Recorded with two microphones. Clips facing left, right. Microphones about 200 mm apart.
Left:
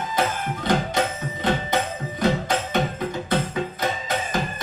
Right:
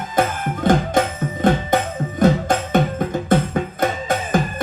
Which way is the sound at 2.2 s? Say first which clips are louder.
Right 6 dB; 50° right (ahead or behind).